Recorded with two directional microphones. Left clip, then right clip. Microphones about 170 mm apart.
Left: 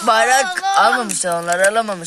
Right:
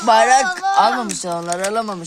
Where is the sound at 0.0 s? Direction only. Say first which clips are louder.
Right 1 dB; 5° right (ahead or behind).